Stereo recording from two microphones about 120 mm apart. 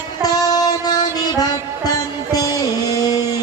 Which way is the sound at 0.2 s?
30° left (ahead or behind).